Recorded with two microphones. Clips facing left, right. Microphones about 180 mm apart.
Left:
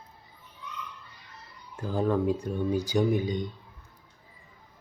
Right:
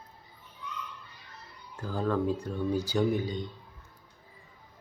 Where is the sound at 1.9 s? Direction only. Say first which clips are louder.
Left 3 dB; 15° left (ahead or behind).